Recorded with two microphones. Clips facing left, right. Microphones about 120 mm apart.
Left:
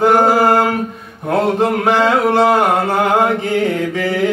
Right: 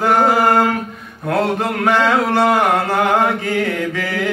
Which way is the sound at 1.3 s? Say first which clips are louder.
Left 3 dB; 25° left (ahead or behind).